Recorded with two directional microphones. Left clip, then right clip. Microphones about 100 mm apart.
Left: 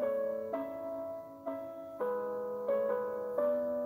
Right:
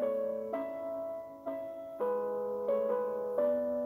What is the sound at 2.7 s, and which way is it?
Music, 30° right (ahead or behind).